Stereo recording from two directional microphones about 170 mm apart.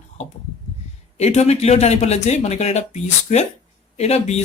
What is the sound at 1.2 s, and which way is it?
Speech, 40° left (ahead or behind).